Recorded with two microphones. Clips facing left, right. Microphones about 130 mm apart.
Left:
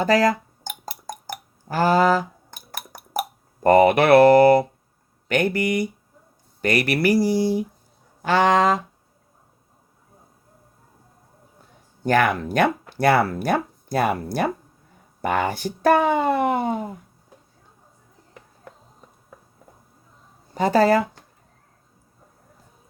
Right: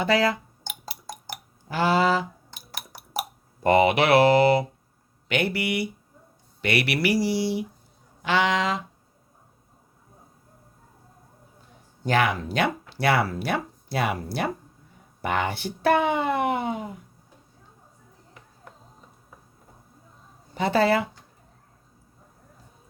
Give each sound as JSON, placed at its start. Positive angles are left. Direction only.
{"t": 0.0, "sound": "dishes", "side_deg": 40}
{"t": 5.3, "sound": "speech", "side_deg": 45}
{"t": 12.0, "sound": "speech", "side_deg": 50}
{"t": 20.5, "sound": "speech", "side_deg": 40}